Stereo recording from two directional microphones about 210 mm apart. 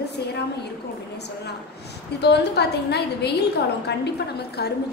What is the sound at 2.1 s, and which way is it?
A woman's voice, 50° left (ahead or behind).